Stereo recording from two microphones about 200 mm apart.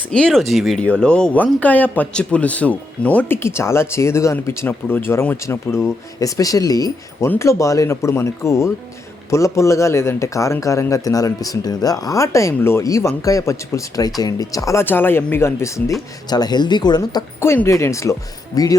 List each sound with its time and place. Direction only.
0.1 s speech: 5° left (ahead or behind)